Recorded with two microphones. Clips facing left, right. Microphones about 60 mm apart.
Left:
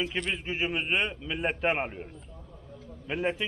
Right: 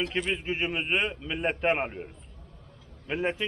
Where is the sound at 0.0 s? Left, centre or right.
Centre.